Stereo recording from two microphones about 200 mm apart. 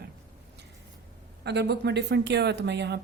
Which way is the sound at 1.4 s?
55° right (ahead or behind).